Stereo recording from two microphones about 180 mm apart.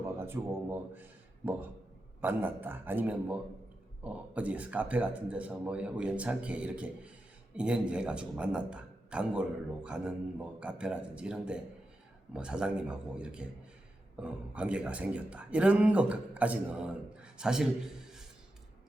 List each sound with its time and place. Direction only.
0.2 s speech: 10° right (ahead or behind)
2.2 s a man's voice: 10° right (ahead or behind)
17.2 s a sound: 5° right (ahead or behind)